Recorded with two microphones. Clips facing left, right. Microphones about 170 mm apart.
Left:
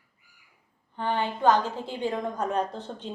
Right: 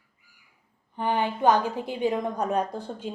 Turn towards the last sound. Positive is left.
turn(degrees=-10)  # may be behind; listen again after turning